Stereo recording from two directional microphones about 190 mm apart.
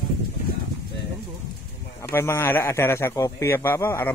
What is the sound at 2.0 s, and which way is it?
A man's voice, 15° left (ahead or behind).